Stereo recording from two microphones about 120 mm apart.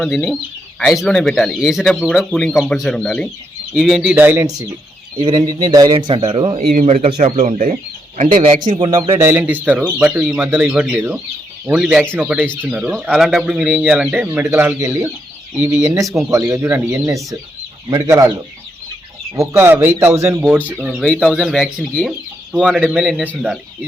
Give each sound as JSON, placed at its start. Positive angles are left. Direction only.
{"t": 0.0, "sound": "speech", "side_deg": 0}
{"t": 3.8, "sound": "speech", "side_deg": -5}
{"t": 4.1, "sound": "speech", "side_deg": -15}
{"t": 4.4, "sound": "speech", "side_deg": -30}
{"t": 5.9, "sound": "speech", "side_deg": -45}
{"t": 6.8, "sound": "speech", "side_deg": -70}
{"t": 8.6, "sound": "speech", "side_deg": -45}
{"t": 9.1, "sound": "speech", "side_deg": -20}
{"t": 11.6, "sound": "speech", "side_deg": -5}
{"t": 15.5, "sound": "speech", "side_deg": -10}
{"t": 15.8, "sound": "speech", "side_deg": -25}
{"t": 17.8, "sound": "speech", "side_deg": -30}
{"t": 19.4, "sound": "speech", "side_deg": -20}
{"t": 20.7, "sound": "speech", "side_deg": -5}